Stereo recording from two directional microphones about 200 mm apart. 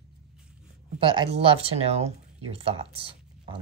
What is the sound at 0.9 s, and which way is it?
Speech, 25° right (ahead or behind).